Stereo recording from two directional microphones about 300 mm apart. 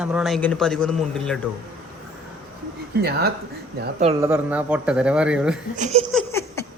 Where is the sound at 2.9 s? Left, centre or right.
Right.